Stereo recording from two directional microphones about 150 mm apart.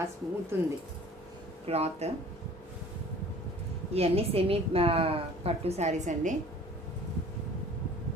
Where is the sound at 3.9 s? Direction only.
40° right (ahead or behind).